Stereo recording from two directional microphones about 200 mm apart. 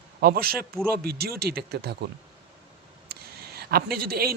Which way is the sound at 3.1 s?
50° right (ahead or behind).